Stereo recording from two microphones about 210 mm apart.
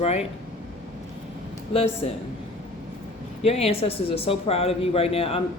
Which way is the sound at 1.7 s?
30° left (ahead or behind).